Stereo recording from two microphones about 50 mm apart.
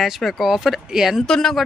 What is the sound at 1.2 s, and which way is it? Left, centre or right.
Speech, centre.